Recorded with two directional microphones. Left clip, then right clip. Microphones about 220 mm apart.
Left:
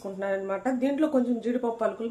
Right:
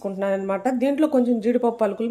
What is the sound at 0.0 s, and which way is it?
Speech, 40° right (ahead or behind).